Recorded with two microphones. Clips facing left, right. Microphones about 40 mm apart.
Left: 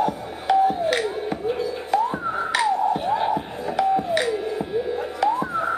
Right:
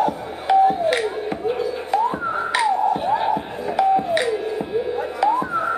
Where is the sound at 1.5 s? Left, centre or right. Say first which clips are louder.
Right 1 dB; centre.